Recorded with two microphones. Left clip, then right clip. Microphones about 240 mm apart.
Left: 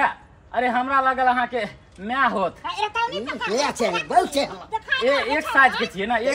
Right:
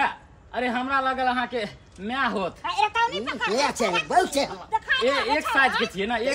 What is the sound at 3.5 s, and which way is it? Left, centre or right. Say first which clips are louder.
A woman's voice: left 2 dB; centre.